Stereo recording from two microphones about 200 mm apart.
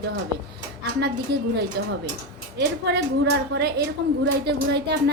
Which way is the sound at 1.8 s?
55° right (ahead or behind).